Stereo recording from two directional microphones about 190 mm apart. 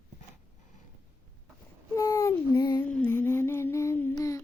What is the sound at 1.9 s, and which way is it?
Child singing, 15° left (ahead or behind).